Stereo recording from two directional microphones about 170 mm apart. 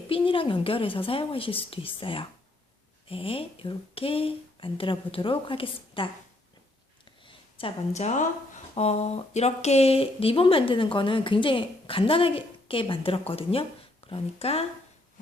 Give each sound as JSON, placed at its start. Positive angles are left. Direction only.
{"t": 0.1, "sound": "speech", "side_deg": 30}
{"t": 7.3, "sound": "a woman's voice", "side_deg": 35}